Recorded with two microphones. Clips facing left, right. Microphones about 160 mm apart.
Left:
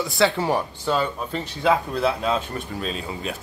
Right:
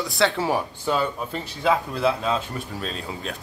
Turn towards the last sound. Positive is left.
turn(degrees=0)  # may be behind; listen again after turning